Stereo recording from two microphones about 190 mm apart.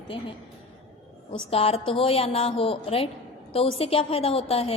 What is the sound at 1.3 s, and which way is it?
A woman's voice, 30° left (ahead or behind).